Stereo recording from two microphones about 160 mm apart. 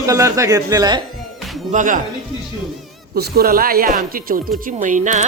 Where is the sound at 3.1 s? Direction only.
75° right (ahead or behind).